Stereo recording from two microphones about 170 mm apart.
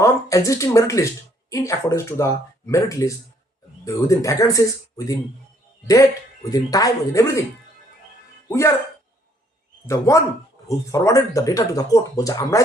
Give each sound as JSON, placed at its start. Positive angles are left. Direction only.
{"t": 0.0, "sound": "speech", "side_deg": 20}
{"t": 6.5, "sound": "speech", "side_deg": 20}
{"t": 8.4, "sound": "speech", "side_deg": 15}
{"t": 9.8, "sound": "speech", "side_deg": 15}